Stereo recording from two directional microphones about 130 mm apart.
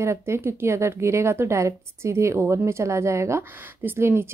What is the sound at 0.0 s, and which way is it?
A woman's voice, 20° right (ahead or behind).